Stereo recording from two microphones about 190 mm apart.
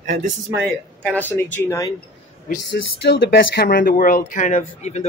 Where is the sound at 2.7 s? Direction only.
65° left (ahead or behind).